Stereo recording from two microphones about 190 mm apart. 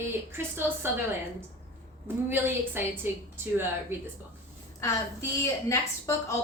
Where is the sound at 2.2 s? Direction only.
10° right (ahead or behind).